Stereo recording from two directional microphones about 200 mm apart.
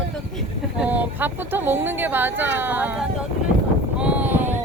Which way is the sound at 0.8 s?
10° right (ahead or behind).